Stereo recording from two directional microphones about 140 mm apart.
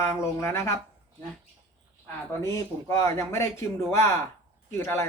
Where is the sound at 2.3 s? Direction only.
20° left (ahead or behind).